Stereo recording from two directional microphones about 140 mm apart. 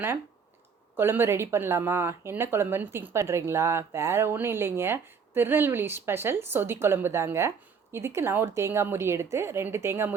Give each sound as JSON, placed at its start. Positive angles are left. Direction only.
{"t": 0.9, "sound": "speech", "side_deg": -15}